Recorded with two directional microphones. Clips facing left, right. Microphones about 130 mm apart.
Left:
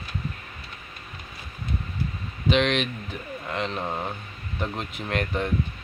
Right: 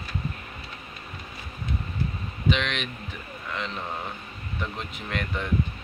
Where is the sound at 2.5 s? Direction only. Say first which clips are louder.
Left 5 dB; 35° left (ahead or behind).